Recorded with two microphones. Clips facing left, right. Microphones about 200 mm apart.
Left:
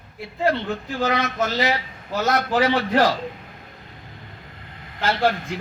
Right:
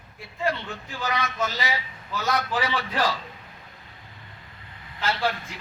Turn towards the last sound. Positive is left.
turn(degrees=50)  # may be behind; listen again after turning